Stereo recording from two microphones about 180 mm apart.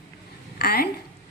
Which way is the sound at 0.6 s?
60° left (ahead or behind).